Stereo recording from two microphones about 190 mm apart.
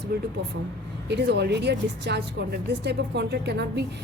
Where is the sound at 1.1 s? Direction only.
65° right (ahead or behind).